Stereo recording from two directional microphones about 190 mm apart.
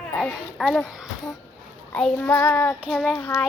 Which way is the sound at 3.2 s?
15° left (ahead or behind).